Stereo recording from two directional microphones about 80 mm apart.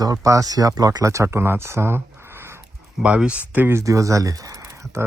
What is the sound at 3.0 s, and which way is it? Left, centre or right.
Speech, centre.